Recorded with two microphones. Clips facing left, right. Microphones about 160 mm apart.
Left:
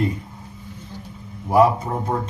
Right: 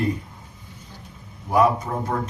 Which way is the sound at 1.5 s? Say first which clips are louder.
Left 3 dB; 30° left (ahead or behind).